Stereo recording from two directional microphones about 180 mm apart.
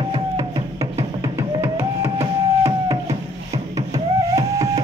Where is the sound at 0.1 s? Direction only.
20° right (ahead or behind).